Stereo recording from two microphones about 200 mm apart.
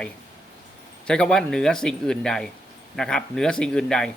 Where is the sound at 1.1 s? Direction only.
5° left (ahead or behind).